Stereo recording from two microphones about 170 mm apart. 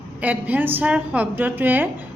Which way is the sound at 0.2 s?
10° right (ahead or behind).